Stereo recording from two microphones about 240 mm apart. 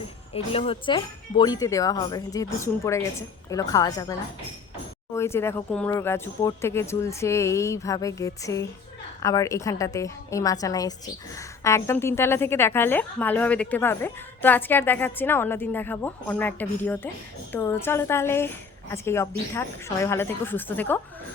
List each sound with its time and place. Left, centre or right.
0.3 s a woman's voice: left
5.1 s a woman's voice: centre